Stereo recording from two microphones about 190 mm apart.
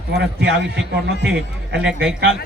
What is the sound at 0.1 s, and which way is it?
Speech, 60° right (ahead or behind).